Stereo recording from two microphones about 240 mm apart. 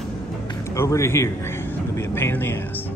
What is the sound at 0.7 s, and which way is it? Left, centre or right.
A man's voice, centre.